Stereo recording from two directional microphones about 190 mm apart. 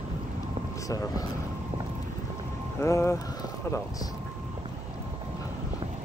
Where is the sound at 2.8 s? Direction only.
15° left (ahead or behind).